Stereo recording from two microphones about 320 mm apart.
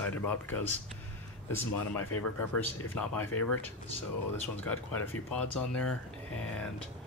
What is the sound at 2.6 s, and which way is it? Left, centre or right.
Speech, centre.